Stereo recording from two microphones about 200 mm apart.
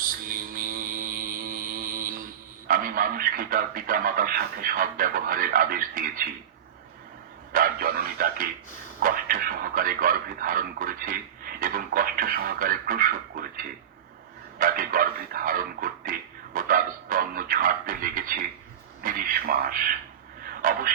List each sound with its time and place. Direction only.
0.0 s mantra: 45° right (ahead or behind)
2.6 s speech: 45° right (ahead or behind)
7.5 s speech: 45° right (ahead or behind)
14.6 s speech: 45° right (ahead or behind)